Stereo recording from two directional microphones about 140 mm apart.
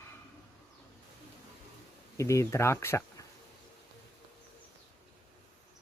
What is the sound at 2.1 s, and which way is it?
Speech, 20° left (ahead or behind).